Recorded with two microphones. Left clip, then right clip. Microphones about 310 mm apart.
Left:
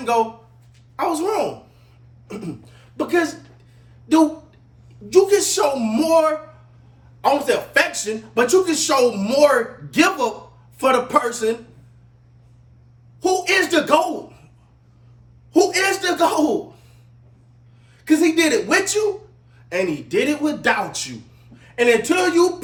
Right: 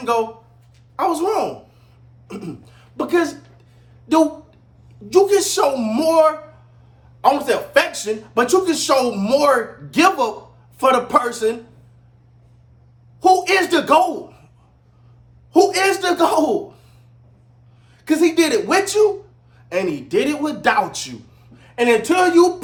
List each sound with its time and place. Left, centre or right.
0.0 s speech: centre
5.0 s speech: centre
13.1 s speech: centre
15.5 s speech: centre
18.0 s speech: centre